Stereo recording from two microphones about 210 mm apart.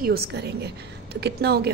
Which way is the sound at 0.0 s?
45° right (ahead or behind).